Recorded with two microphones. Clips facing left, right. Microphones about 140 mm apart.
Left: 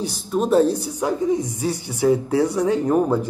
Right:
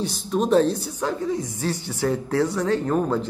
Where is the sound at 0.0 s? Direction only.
5° left (ahead or behind).